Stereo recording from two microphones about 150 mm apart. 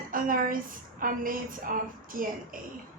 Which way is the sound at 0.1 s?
65° right (ahead or behind).